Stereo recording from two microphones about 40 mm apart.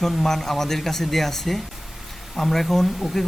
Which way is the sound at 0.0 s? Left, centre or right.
Centre.